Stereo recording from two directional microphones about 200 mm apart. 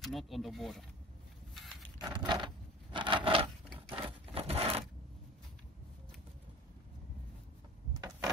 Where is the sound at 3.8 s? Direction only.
25° right (ahead or behind).